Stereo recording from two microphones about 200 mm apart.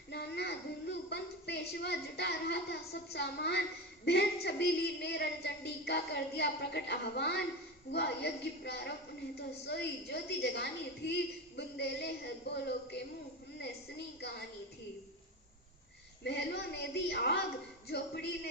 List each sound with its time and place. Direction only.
0.1 s a sound: 55° left (ahead or behind)
4.0 s a woman's voice: 55° left (ahead or behind)
14.2 s a woman's voice: 55° left (ahead or behind)
16.2 s a woman's voice: 55° left (ahead or behind)